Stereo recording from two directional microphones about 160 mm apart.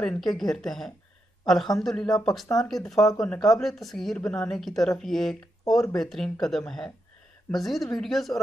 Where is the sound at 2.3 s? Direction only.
Centre (ahead or behind).